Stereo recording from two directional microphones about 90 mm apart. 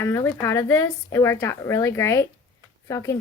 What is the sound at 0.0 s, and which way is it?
Speech, 30° left (ahead or behind).